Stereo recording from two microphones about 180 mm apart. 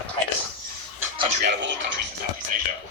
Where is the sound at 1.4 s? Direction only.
80° right.